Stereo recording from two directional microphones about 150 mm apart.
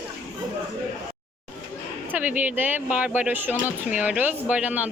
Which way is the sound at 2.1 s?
10° right (ahead or behind).